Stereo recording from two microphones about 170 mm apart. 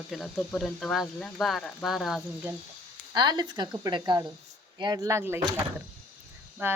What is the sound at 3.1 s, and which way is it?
Speech, 25° right (ahead or behind).